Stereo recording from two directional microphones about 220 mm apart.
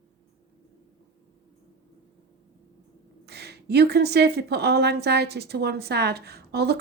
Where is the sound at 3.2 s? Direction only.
45° right (ahead or behind).